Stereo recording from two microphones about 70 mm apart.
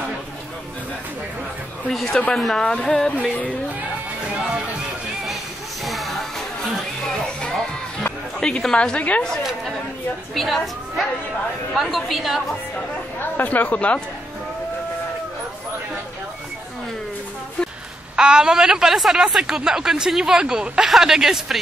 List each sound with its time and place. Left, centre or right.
1.9 s a woman's voice: centre
5.9 s music: centre
8.4 s a woman's voice: centre
9.4 s a woman's voice: centre
13.2 s speech: left
18.1 s a woman's voice: centre